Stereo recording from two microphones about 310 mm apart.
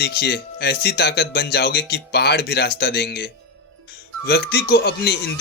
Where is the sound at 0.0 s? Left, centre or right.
Left.